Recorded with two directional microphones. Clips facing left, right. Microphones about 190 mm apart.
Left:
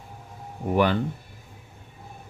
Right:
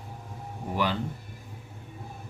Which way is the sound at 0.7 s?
55° left (ahead or behind).